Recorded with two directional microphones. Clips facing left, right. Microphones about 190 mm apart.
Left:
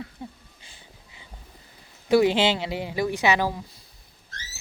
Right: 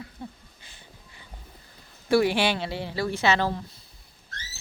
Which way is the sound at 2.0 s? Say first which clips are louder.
Left 3 dB; 20° left (ahead or behind).